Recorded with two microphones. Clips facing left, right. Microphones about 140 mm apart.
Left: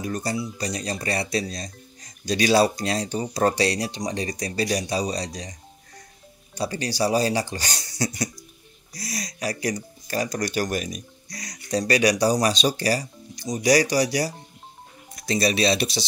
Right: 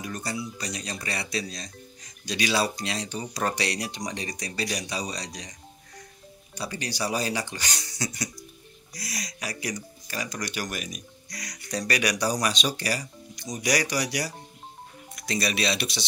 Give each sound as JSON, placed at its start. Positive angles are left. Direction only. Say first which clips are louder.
{"t": 0.0, "sound": "speech", "louder": "left 5 dB", "side_deg": 35}